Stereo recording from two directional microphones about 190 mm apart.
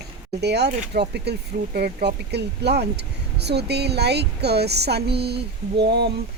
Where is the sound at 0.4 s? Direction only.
60° right (ahead or behind).